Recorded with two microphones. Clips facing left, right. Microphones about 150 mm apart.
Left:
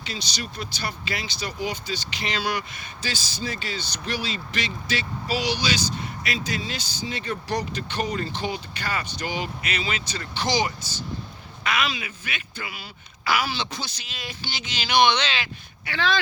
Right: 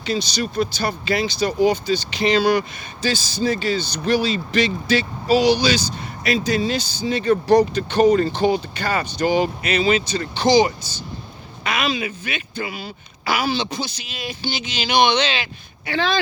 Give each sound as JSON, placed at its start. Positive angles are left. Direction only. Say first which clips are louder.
{"t": 0.0, "sound": "speech", "louder": "right 11 dB", "side_deg": -35}